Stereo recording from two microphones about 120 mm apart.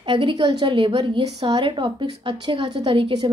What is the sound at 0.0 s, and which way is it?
A woman's voice, 45° right (ahead or behind).